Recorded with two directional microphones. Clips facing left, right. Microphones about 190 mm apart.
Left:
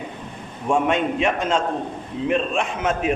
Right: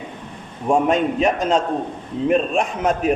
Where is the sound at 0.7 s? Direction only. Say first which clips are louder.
Right 3 dB; 40° right (ahead or behind).